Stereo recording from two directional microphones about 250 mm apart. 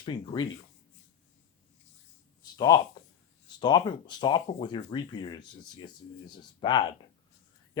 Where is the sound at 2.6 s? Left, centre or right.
Centre.